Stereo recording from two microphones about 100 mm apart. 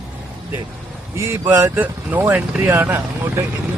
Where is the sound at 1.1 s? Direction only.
30° right (ahead or behind).